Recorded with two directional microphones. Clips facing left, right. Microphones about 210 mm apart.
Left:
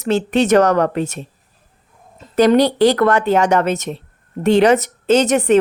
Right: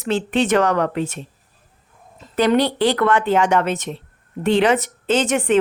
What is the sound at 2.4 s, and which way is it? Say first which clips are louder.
Speech: left 5 dB; 40° left (ahead or behind).